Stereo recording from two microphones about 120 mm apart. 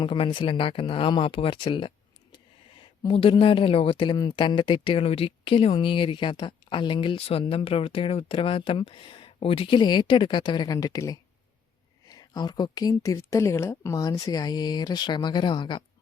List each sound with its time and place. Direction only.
0.0 s speech: 45° left (ahead or behind)